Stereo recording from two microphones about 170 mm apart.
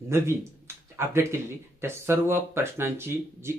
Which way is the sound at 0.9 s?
15° right (ahead or behind).